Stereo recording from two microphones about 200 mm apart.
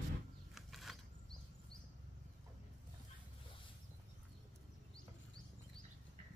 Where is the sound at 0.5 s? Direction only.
Centre (ahead or behind).